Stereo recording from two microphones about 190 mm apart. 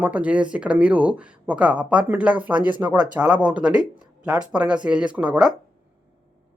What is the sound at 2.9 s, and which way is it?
Speech, 20° right (ahead or behind).